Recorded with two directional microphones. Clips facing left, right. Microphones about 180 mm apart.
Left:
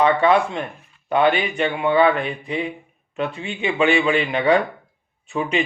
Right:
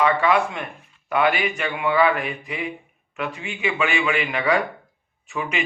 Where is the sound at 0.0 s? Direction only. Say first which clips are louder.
Left 3 dB; 30° left (ahead or behind).